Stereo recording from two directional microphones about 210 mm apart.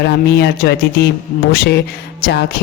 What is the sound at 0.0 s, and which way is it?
Speech, 50° left (ahead or behind).